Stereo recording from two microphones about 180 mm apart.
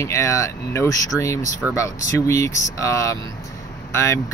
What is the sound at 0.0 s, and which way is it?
Speech, 15° left (ahead or behind).